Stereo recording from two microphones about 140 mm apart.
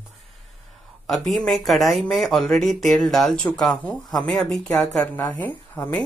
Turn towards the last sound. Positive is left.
turn(degrees=10)  # may be behind; listen again after turning